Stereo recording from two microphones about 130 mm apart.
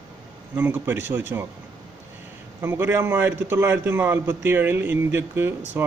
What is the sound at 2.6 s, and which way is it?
A man's voice, 15° right (ahead or behind).